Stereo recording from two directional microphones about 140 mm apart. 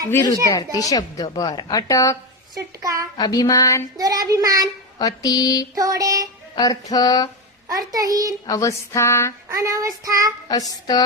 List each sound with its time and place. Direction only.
0.4 s a woman's voice: 25° left (ahead or behind)
2.6 s child singing: 25° right (ahead or behind)
3.2 s a woman's voice: 30° left (ahead or behind)
3.9 s child singing: 25° right (ahead or behind)
4.9 s a woman's voice: 25° left (ahead or behind)
5.7 s child singing: 25° right (ahead or behind)
6.6 s a woman's voice: 25° left (ahead or behind)
7.7 s child singing: 25° right (ahead or behind)
8.4 s a woman's voice: 20° left (ahead or behind)
9.5 s child singing: 25° right (ahead or behind)
10.5 s a woman's voice: 25° left (ahead or behind)